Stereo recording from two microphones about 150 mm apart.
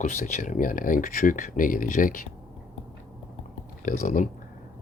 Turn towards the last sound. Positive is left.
turn(degrees=60)  # may be behind; listen again after turning